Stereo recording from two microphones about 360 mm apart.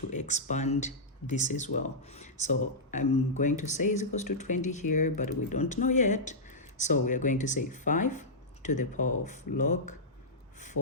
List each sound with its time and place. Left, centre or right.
0.1 s speech: centre